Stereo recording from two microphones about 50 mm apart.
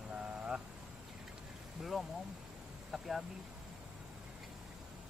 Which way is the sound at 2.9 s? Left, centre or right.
Centre.